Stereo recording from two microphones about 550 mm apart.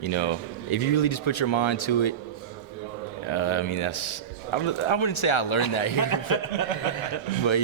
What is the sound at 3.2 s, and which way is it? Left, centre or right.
A man's voice, left.